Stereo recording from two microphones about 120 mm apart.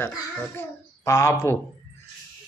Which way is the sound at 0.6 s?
25° left (ahead or behind).